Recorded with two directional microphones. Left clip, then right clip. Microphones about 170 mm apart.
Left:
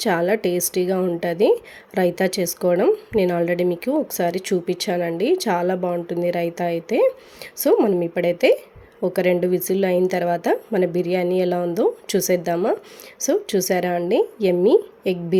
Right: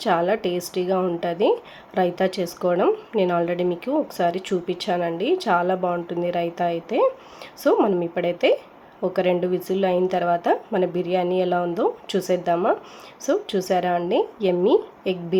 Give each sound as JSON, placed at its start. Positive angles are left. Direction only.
{"t": 0.0, "sound": "speech", "side_deg": 40}